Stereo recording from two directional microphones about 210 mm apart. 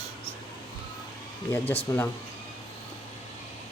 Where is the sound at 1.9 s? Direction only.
15° left (ahead or behind).